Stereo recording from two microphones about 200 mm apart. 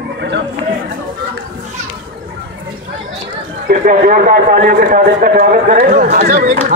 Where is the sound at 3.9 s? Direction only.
45° right (ahead or behind).